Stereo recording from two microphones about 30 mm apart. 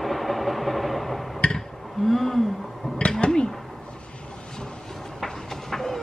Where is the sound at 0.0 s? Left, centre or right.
Centre.